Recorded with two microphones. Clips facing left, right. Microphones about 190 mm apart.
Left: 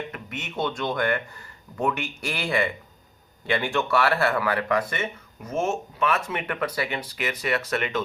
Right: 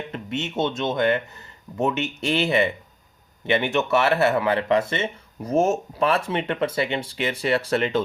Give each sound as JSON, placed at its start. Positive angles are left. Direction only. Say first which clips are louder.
{"t": 0.1, "sound": "speech", "louder": "right 7 dB", "side_deg": -25}